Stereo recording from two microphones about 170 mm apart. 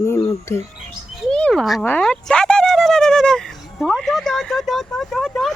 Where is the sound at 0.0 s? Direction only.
15° left (ahead or behind).